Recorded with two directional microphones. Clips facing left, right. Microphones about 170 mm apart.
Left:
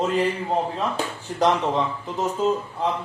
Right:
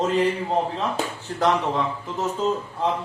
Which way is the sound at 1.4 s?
20° left (ahead or behind).